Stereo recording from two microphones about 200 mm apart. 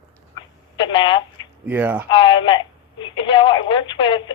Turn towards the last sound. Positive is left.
turn(degrees=25)  # may be behind; listen again after turning